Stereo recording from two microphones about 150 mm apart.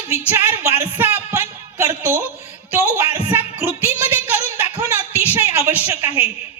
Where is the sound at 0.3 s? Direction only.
15° right (ahead or behind).